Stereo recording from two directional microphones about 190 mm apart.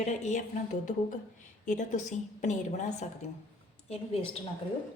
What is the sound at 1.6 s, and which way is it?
A woman's voice, 40° left (ahead or behind).